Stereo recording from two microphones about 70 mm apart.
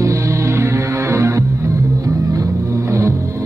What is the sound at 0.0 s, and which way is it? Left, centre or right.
Music, right.